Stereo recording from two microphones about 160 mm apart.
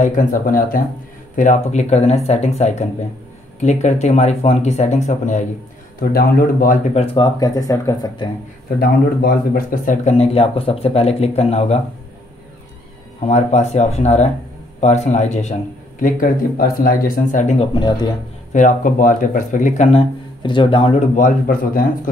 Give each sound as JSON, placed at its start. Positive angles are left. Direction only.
{"t": 0.0, "sound": "speech", "side_deg": 50}
{"t": 5.9, "sound": "speech", "side_deg": 65}
{"t": 7.2, "sound": "speech", "side_deg": 20}
{"t": 8.7, "sound": "speech", "side_deg": 75}
{"t": 13.3, "sound": "speech", "side_deg": 45}
{"t": 16.0, "sound": "speech", "side_deg": 60}